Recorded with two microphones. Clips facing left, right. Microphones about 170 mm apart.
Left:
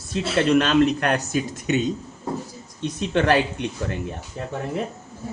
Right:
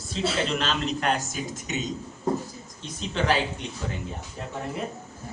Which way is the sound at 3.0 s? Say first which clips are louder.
Left 5 dB; 60° left (ahead or behind).